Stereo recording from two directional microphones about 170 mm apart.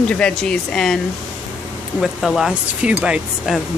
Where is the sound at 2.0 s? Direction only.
Centre (ahead or behind).